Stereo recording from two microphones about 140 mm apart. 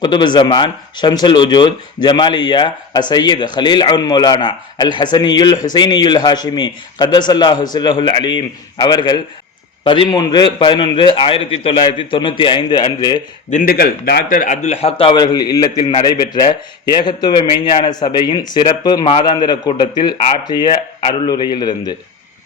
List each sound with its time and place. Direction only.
0.0 s speech: 30° left (ahead or behind)
13.5 s a man's voice: 80° left; by 21.9 s 30° left (ahead or behind)